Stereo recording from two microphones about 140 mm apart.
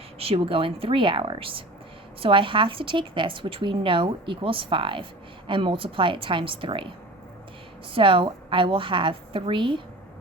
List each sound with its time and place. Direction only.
0.2 s a woman's voice: 40° right (ahead or behind)
7.9 s a woman's voice: 40° right (ahead or behind)